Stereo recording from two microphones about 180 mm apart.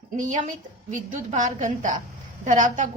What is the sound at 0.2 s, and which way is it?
A woman's voice, 45° right (ahead or behind).